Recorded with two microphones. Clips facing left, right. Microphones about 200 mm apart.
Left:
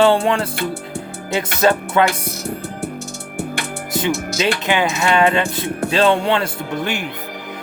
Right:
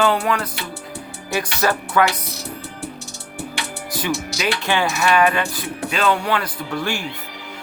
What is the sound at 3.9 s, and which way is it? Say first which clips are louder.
Music: left 4 dB; 25° left (ahead or behind).